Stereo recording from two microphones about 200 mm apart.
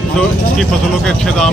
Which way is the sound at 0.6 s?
5° left (ahead or behind).